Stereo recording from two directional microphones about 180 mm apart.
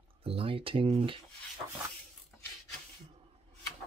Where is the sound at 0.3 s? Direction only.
30° right (ahead or behind).